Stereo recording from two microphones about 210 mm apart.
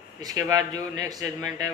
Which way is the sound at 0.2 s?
15° right (ahead or behind).